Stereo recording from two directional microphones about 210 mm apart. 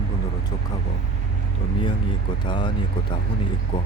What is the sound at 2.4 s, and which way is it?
Speech, 20° left (ahead or behind).